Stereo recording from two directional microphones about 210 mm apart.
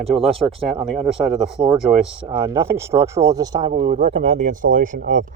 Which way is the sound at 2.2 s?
20° right (ahead or behind).